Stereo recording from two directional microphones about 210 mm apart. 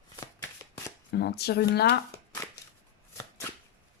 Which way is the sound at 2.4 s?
10° left (ahead or behind).